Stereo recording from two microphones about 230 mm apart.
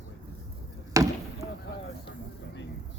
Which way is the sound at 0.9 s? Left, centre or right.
Centre.